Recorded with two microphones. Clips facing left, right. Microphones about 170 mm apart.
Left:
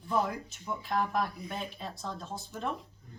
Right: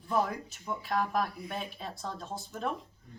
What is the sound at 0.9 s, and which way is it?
Speech, centre (ahead or behind).